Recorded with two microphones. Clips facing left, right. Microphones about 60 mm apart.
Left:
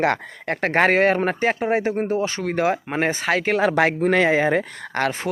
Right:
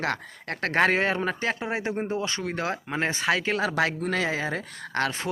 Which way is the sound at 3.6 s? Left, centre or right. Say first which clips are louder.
Left 7 dB; left.